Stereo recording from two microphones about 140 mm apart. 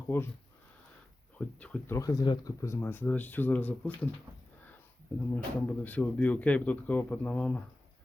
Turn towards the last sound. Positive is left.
turn(degrees=10)  # may be behind; listen again after turning